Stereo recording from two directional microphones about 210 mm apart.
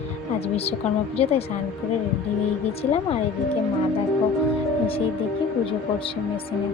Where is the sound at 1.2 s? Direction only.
30° left (ahead or behind).